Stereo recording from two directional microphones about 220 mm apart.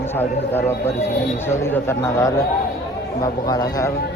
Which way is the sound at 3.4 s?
15° left (ahead or behind).